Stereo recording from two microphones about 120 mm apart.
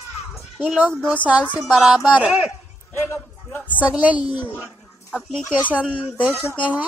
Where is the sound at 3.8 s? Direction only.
10° right (ahead or behind).